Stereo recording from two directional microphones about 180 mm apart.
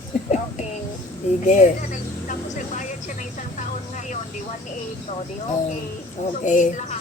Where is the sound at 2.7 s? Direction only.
45° left (ahead or behind).